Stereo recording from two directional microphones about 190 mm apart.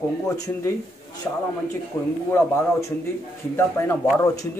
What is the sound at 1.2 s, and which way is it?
A man's voice, 10° left (ahead or behind).